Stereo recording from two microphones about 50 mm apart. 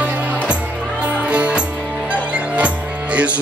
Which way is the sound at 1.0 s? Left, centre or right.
Right.